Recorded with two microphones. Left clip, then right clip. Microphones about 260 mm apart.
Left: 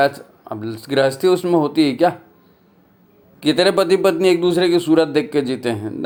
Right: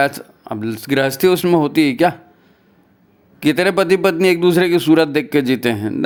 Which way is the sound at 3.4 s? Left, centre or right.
Right.